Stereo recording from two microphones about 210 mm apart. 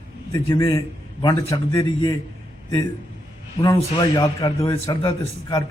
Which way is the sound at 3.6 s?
20° left (ahead or behind).